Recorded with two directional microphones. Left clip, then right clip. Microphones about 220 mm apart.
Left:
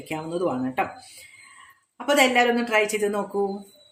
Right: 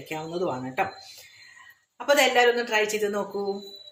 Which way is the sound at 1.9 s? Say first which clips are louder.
Left 1 dB; 40° left (ahead or behind).